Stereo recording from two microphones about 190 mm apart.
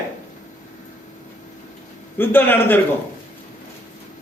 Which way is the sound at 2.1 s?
10° left (ahead or behind).